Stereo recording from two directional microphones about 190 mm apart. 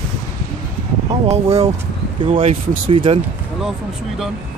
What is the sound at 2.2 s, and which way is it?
Speech, 30° right (ahead or behind).